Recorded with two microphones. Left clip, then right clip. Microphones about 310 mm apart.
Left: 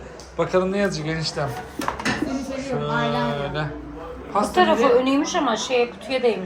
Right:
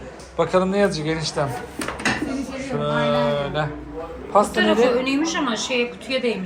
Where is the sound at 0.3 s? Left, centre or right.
Centre.